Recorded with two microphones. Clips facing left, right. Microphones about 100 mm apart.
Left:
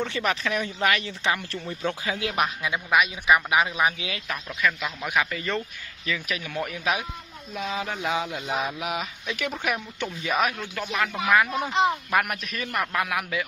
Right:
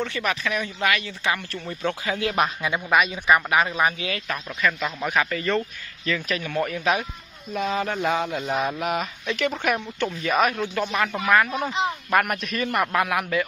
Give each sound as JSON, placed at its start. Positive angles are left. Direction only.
{"t": 0.0, "sound": "speech", "side_deg": 25}
{"t": 4.6, "sound": "speech", "side_deg": 0}
{"t": 10.8, "sound": "speech", "side_deg": -15}
{"t": 11.1, "sound": "speech", "side_deg": 10}